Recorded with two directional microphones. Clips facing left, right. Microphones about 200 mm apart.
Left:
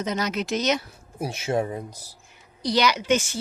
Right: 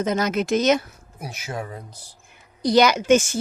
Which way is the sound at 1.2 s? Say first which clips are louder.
Left 7 dB; 30° left (ahead or behind).